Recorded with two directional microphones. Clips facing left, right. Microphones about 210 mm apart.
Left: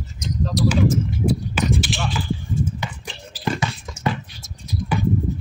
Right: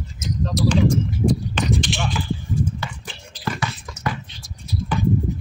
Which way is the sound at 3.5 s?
25° left (ahead or behind).